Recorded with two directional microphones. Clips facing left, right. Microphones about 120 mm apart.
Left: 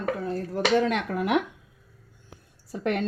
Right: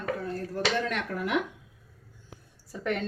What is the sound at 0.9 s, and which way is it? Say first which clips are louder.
Speech: left 5 dB; 75° left (ahead or behind).